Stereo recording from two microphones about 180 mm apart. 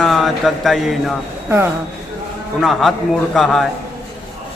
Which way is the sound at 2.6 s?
Centre (ahead or behind).